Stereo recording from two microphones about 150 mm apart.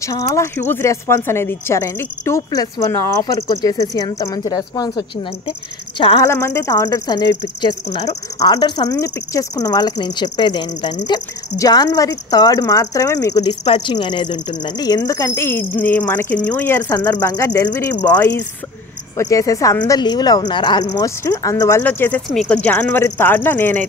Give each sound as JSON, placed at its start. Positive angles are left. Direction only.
{"t": 0.0, "sound": "speech", "side_deg": 20}
{"t": 6.2, "sound": "speech", "side_deg": 20}
{"t": 13.7, "sound": "a woman's voice", "side_deg": 45}
{"t": 13.9, "sound": "speech", "side_deg": 30}
{"t": 17.6, "sound": "speech", "side_deg": 25}
{"t": 19.1, "sound": "speech", "side_deg": 20}